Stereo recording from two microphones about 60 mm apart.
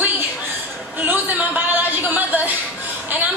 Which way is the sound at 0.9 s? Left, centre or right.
Right.